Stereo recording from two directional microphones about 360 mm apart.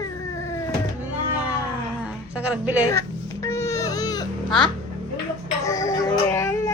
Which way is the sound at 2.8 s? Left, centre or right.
Centre.